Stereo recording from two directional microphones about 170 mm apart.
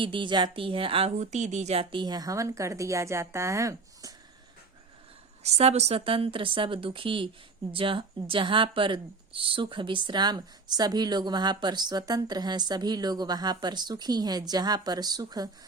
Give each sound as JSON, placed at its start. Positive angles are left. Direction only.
{"t": 0.0, "sound": "speech", "side_deg": -30}
{"t": 5.4, "sound": "a woman's voice", "side_deg": -40}